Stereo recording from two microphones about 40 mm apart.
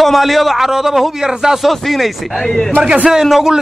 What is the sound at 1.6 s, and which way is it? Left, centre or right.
Speech, centre.